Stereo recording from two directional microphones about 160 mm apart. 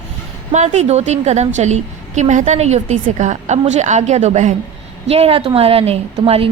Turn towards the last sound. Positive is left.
turn(degrees=-40)  # may be behind; listen again after turning